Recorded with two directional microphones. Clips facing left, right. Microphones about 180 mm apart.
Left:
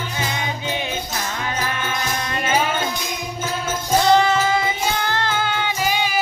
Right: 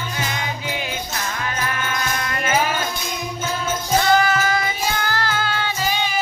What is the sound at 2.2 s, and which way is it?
Music, 20° left (ahead or behind).